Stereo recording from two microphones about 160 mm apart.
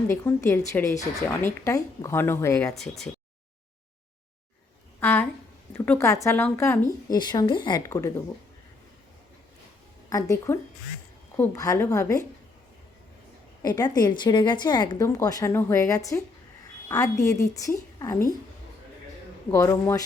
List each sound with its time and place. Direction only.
0.1 s speech: 15° left (ahead or behind)
2.7 s speech: centre (ahead or behind)
4.9 s a woman's voice: 15° left (ahead or behind)
7.1 s a woman's voice: 25° left (ahead or behind)
10.1 s a woman's voice: 20° left (ahead or behind)
13.6 s a woman's voice: 25° left (ahead or behind)
19.5 s speech: 20° left (ahead or behind)